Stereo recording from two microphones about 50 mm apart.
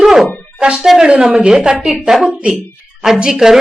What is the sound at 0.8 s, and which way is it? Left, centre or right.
Speech, centre.